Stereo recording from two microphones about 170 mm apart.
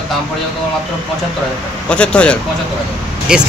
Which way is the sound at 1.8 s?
5° left (ahead or behind).